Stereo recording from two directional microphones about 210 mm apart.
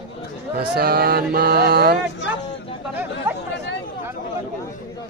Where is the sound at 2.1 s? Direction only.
55° left (ahead or behind).